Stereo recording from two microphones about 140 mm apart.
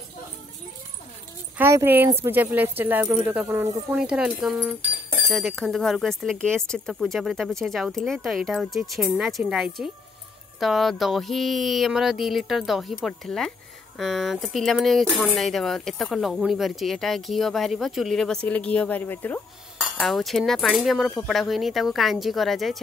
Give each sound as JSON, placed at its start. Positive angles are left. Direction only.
{"t": 1.6, "sound": "speech", "side_deg": -20}
{"t": 19.8, "sound": "speech", "side_deg": 0}